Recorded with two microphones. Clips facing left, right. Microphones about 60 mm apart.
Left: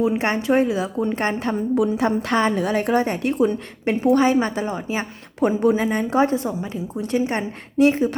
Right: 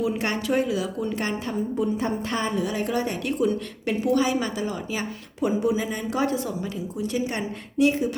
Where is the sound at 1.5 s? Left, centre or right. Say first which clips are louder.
Left 6 dB; left.